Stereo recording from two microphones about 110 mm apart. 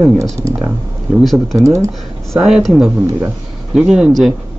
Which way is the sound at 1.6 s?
30° right (ahead or behind).